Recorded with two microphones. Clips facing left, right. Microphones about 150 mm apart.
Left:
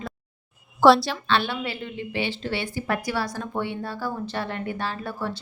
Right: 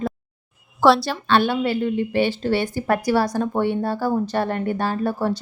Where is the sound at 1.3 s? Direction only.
45° right (ahead or behind).